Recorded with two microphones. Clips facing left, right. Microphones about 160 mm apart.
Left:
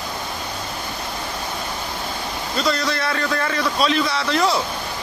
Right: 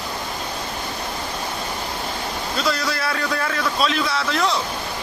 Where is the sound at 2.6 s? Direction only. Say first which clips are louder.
Left 2 dB; 5° right (ahead or behind).